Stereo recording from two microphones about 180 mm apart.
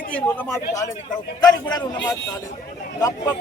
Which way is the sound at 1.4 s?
20° left (ahead or behind).